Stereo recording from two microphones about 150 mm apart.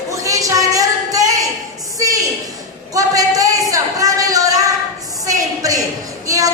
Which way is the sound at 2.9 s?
25° right (ahead or behind).